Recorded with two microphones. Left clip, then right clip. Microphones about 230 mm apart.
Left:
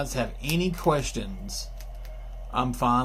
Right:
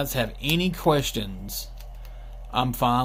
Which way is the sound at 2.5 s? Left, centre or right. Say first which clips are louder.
Right 1 dB; right.